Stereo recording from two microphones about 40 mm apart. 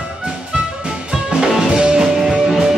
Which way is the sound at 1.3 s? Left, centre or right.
Centre.